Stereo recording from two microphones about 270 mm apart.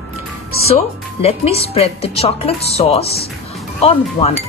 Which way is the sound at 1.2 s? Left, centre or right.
Left.